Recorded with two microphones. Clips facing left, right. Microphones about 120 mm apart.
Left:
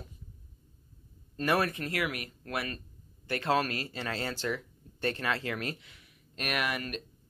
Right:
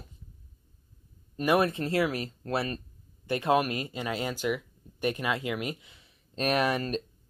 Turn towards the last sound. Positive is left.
turn(degrees=-35)  # may be behind; listen again after turning